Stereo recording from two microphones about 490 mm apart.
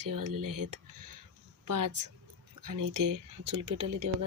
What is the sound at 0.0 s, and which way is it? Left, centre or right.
A woman's voice, right.